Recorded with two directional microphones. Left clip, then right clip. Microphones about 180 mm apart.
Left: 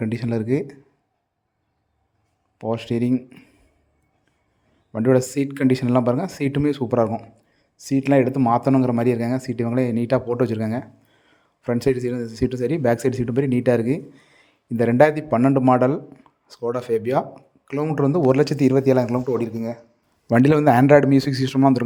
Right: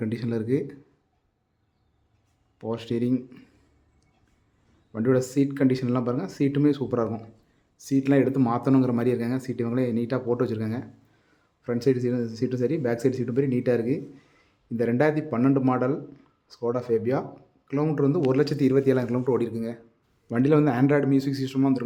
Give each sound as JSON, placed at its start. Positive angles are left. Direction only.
{"t": 0.0, "sound": "a man's voice", "side_deg": 25}
{"t": 2.6, "sound": "a man's voice", "side_deg": 25}
{"t": 4.9, "sound": "a man's voice", "side_deg": 25}
{"t": 20.3, "sound": "speech", "side_deg": 40}